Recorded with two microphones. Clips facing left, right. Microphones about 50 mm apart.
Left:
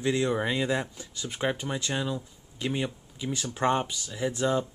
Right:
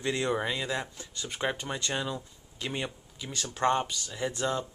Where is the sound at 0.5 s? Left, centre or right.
Centre.